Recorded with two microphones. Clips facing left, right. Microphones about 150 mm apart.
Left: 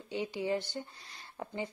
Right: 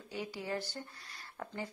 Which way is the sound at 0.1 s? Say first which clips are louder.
Left 6 dB; 20° left (ahead or behind).